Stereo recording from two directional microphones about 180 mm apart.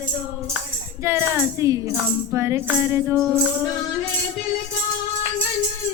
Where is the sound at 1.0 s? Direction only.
15° right (ahead or behind).